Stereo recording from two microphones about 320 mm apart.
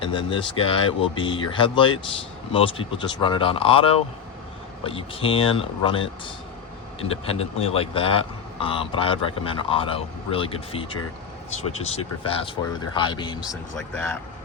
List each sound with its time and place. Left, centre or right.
0.0 s speech: centre